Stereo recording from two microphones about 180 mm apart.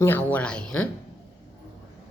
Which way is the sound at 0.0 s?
10° left (ahead or behind).